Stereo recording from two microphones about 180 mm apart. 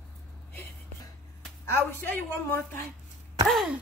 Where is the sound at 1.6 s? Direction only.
15° left (ahead or behind).